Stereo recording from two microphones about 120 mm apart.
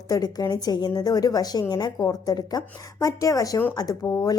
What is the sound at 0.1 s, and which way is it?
A woman's voice, 35° left (ahead or behind).